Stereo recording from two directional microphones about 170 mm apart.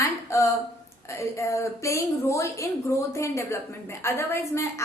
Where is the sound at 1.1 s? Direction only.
15° left (ahead or behind).